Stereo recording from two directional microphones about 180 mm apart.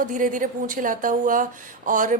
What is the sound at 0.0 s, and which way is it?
Speech, 45° right (ahead or behind).